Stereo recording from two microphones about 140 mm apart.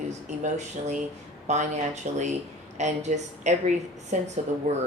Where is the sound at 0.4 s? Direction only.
55° right (ahead or behind).